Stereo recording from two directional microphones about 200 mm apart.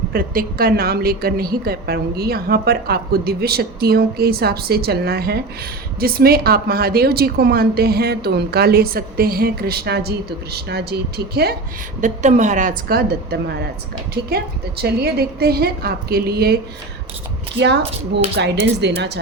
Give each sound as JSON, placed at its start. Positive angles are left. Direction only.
{"t": 0.1, "sound": "a woman's voice", "side_deg": -45}
{"t": 11.9, "sound": "a woman's voice", "side_deg": -35}
{"t": 17.6, "sound": "speech", "side_deg": -60}